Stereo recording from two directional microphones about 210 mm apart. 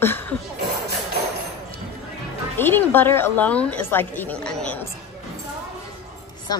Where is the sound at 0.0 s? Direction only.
10° left (ahead or behind).